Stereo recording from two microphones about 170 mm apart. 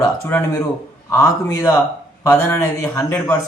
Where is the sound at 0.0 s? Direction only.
10° left (ahead or behind).